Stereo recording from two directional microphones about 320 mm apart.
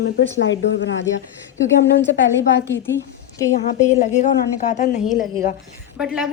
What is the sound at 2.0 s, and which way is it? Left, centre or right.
Speech, left.